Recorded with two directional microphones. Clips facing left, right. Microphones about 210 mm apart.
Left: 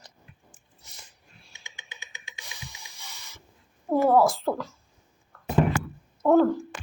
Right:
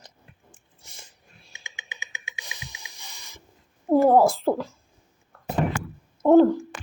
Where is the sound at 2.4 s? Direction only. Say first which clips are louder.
Left 1 dB; 20° right (ahead or behind).